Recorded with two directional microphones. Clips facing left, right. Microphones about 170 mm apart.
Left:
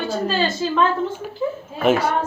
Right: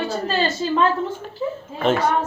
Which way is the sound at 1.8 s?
10° left (ahead or behind).